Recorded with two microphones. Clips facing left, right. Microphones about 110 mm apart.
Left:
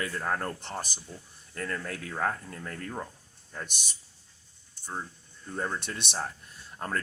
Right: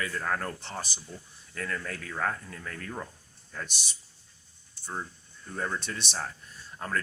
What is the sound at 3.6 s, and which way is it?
Speech, 50° left (ahead or behind).